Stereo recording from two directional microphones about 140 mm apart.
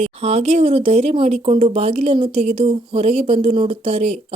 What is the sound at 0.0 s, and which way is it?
A woman's voice, 45° right (ahead or behind).